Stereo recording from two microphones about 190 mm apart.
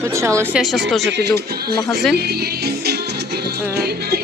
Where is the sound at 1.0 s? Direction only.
65° right (ahead or behind).